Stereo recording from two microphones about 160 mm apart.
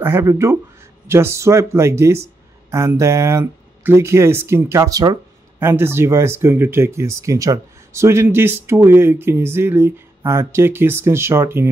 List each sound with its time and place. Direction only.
0.0 s speech: 15° right (ahead or behind)